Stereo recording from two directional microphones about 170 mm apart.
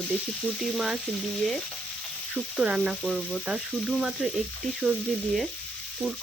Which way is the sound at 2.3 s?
5° right (ahead or behind).